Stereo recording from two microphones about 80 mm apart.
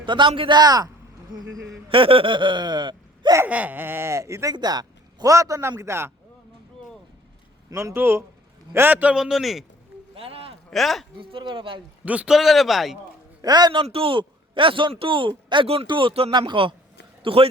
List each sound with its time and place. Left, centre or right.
0.0 s a man's voice: right
2.0 s speech: right
3.4 s speech: right
4.5 s a sound: right
5.3 s a man's voice: right
7.7 s a man's voice: right
7.9 s speech: right
9.1 s speech: centre
10.7 s speech: centre
11.2 s a man's voice: right
12.0 s a man's voice: centre
12.3 s speech: centre
13.4 s a man's voice: right